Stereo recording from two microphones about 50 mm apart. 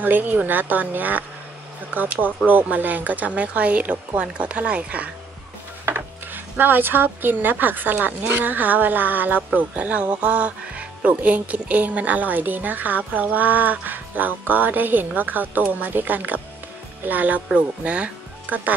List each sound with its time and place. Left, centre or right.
0.0 s speech: right
6.6 s speech: right
9.8 s speech: right
17.6 s speech: right
18.5 s speech: right